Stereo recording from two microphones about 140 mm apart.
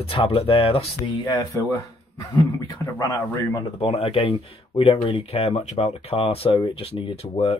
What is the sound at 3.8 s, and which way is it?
Speech, 45° left (ahead or behind).